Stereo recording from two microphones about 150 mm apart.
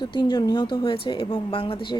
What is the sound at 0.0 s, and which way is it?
A woman's voice, 30° left (ahead or behind).